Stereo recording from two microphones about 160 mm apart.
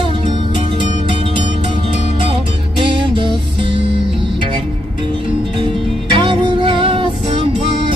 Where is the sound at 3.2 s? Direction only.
30° right (ahead or behind).